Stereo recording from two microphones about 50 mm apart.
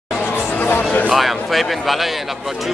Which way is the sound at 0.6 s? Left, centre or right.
Left.